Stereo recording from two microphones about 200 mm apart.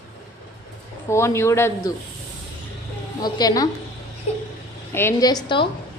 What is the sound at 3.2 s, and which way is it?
Speech, 20° left (ahead or behind).